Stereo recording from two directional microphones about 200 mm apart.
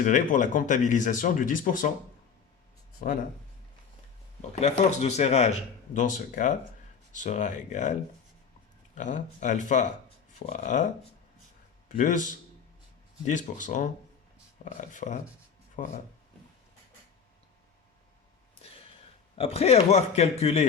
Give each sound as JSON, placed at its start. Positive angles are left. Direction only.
{"t": 0.0, "sound": "speech", "side_deg": 40}
{"t": 3.0, "sound": "speech", "side_deg": 40}
{"t": 4.6, "sound": "speech", "side_deg": 35}
{"t": 9.0, "sound": "speech", "side_deg": 40}
{"t": 11.9, "sound": "speech", "side_deg": 40}
{"t": 19.4, "sound": "speech", "side_deg": 30}